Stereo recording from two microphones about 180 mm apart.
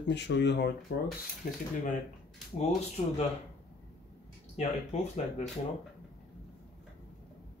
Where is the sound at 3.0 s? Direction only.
35° left (ahead or behind).